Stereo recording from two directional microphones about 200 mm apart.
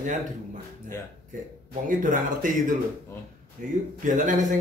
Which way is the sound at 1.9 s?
40° right (ahead or behind).